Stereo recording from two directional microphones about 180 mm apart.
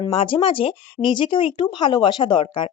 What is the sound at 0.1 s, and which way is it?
Speech, 30° left (ahead or behind).